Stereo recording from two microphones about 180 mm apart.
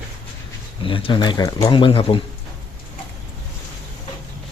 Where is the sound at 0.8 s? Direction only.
30° left (ahead or behind).